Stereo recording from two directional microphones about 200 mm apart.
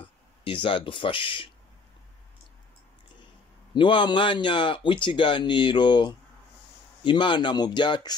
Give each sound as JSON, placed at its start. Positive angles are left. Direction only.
{"t": 0.4, "sound": "speech", "side_deg": 25}
{"t": 3.7, "sound": "speech", "side_deg": 25}